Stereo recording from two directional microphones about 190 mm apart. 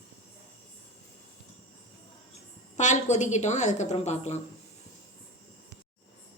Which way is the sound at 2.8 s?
40° left (ahead or behind).